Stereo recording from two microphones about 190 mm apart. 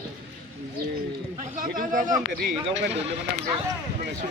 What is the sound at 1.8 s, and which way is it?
Speech, 45° right (ahead or behind).